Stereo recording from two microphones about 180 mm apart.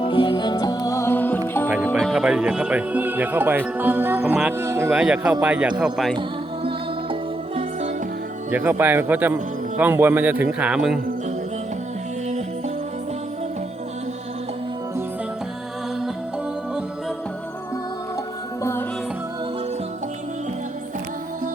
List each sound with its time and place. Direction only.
0.0 s music: 25° left (ahead or behind); by 1.4 s 10° left (ahead or behind)
2.0 s speech: centre (ahead or behind)
6.7 s music: 30° right (ahead or behind)
8.5 s speech: 10° right (ahead or behind)
18.6 s music: 15° left (ahead or behind)